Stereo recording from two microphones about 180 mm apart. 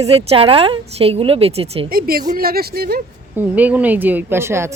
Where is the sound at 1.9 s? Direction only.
55° right (ahead or behind).